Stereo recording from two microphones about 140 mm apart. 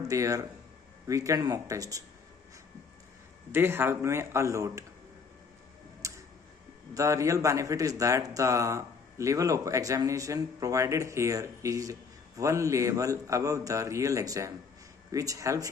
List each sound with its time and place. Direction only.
0.1 s a man's voice: 25° right (ahead or behind)
3.5 s a man's voice: 15° right (ahead or behind)
6.0 s tick-tock: 20° right (ahead or behind)
6.9 s a man's voice: 25° right (ahead or behind)